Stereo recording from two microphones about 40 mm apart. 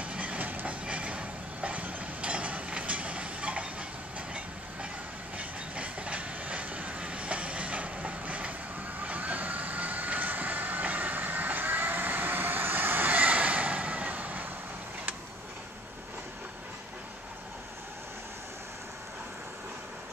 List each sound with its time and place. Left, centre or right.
0.0 s train: right
0.8 s mechanisms: right
5.4 s train: right
9.0 s vehicle: right